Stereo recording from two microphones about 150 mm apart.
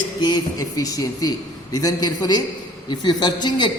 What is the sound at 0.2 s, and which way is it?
A man's voice, 25° left (ahead or behind).